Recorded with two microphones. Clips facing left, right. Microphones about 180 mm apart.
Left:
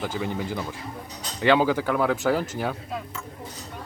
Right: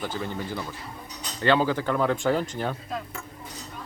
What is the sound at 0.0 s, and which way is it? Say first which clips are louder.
Speech: left 3 dB; 10° left (ahead or behind).